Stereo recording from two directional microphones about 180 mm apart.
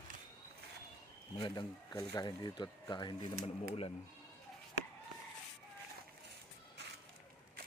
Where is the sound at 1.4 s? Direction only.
25° left (ahead or behind).